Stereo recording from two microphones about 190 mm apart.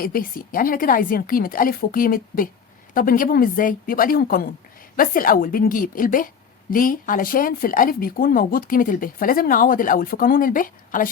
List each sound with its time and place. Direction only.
0.0 s a woman's voice: 50° left (ahead or behind)